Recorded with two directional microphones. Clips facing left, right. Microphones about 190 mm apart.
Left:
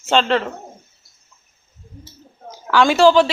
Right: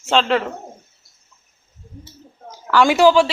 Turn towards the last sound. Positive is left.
turn(degrees=-10)  # may be behind; listen again after turning